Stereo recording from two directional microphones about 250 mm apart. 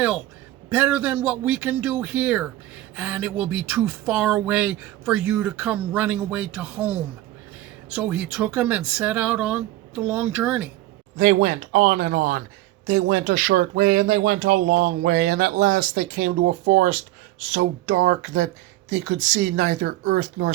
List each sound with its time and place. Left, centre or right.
0.7 s speech: centre
11.2 s speech: right